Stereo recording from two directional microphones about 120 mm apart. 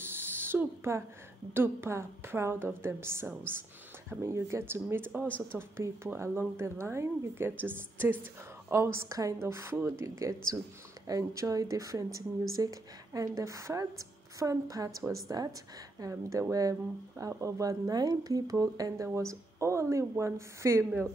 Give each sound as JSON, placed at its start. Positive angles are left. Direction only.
{"t": 0.0, "sound": "owl", "side_deg": -20}
{"t": 1.5, "sound": "speech", "side_deg": -20}